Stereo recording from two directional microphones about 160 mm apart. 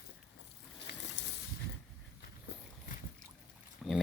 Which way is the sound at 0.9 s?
90° left.